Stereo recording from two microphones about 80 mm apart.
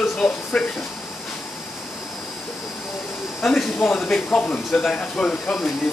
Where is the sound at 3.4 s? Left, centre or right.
Centre.